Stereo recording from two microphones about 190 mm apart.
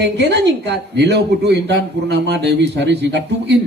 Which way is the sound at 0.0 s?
65° right (ahead or behind).